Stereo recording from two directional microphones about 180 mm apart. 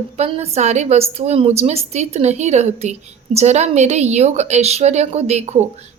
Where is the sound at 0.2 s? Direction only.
35° right (ahead or behind).